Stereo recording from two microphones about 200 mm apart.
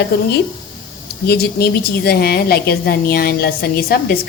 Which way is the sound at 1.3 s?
50° left (ahead or behind).